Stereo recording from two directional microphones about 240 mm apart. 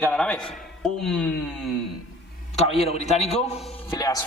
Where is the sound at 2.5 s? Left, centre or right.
Left.